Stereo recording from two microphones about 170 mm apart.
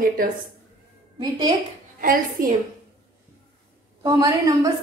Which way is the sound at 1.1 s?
25° right (ahead or behind).